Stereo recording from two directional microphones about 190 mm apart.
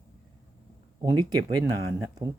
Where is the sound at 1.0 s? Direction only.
20° right (ahead or behind).